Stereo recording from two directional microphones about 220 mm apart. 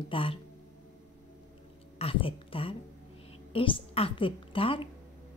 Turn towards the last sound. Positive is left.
turn(degrees=25)  # may be behind; listen again after turning